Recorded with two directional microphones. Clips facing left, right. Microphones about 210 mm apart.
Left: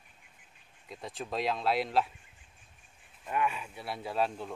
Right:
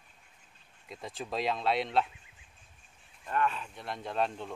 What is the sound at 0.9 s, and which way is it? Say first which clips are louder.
Speech: even; centre (ahead or behind).